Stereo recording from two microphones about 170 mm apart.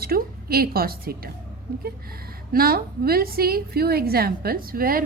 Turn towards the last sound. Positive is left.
turn(degrees=-60)  # may be behind; listen again after turning